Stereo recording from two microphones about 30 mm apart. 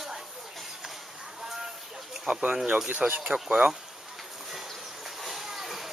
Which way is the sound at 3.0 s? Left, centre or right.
Right.